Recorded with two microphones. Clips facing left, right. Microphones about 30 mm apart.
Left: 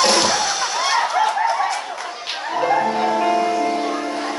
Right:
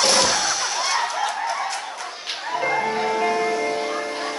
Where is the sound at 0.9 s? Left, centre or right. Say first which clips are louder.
Left 7 dB; left.